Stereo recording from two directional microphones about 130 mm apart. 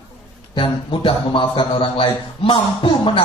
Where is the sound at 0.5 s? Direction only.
40° left (ahead or behind).